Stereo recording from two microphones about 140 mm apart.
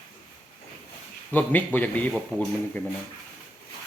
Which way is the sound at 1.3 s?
15° left (ahead or behind).